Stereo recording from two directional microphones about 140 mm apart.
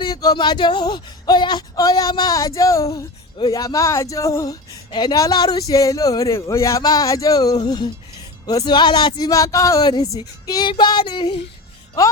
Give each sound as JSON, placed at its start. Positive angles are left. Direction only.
{"t": 0.0, "sound": "speech", "side_deg": 30}